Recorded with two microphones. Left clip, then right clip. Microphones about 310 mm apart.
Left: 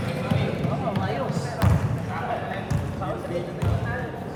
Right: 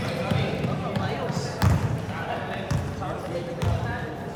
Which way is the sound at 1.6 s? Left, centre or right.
Centre.